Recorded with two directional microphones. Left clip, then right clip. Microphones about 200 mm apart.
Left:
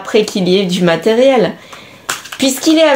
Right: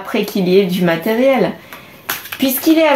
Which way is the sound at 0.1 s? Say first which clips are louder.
Left 2 dB; 50° left (ahead or behind).